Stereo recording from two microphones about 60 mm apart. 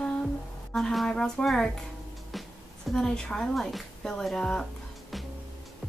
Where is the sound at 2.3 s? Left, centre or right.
Centre.